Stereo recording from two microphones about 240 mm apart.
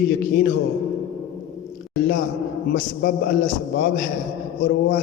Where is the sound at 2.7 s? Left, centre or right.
Left.